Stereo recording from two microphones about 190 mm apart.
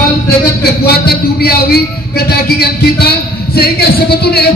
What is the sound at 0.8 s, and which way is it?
A man's voice, 55° left (ahead or behind).